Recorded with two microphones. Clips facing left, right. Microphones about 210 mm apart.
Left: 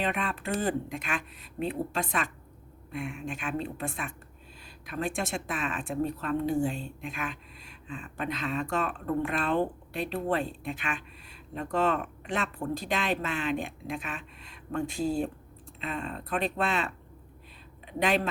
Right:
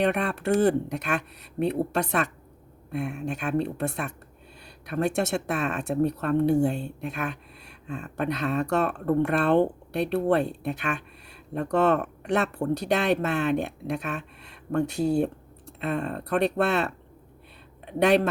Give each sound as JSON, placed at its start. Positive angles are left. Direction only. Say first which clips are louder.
{"t": 0.0, "sound": "speech", "louder": "right 7 dB", "side_deg": -70}
{"t": 3.2, "sound": "speech", "louder": "right 8 dB", "side_deg": -65}